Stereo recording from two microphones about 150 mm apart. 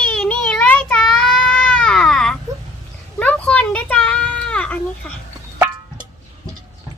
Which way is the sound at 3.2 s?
10° left (ahead or behind).